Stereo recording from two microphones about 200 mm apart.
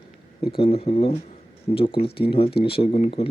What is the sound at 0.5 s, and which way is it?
A man's voice, 30° left (ahead or behind).